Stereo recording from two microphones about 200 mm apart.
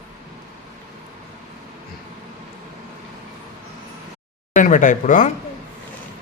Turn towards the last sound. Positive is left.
turn(degrees=40)  # may be behind; listen again after turning